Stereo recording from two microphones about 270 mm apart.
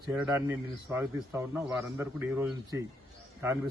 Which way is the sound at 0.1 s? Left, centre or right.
Centre.